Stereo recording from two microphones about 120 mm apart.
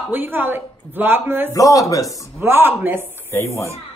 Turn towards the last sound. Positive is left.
turn(degrees=25)  # may be behind; listen again after turning